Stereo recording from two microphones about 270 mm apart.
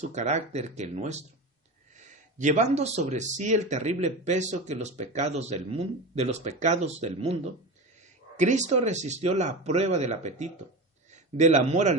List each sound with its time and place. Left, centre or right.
0.0 s a man's voice: right